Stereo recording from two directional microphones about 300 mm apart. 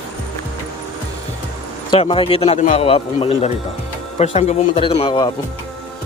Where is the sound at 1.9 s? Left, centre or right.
Centre.